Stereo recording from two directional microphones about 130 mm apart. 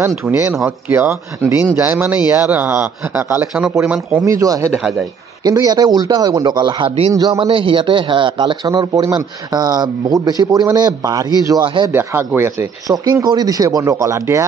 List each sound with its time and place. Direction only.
0.3 s speech: 15° right (ahead or behind)
4.3 s speech: 25° right (ahead or behind)
7.3 s speech: 40° right (ahead or behind)
11.6 s speech: 40° right (ahead or behind)
11.9 s speech: 15° right (ahead or behind)